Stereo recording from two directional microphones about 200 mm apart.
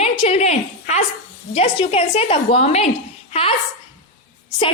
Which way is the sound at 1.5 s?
30° left (ahead or behind).